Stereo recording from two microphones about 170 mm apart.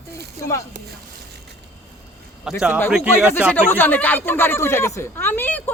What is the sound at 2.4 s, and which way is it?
Speech, 5° right (ahead or behind).